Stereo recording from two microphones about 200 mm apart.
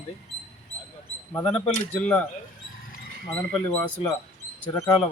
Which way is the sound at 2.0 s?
5° left (ahead or behind).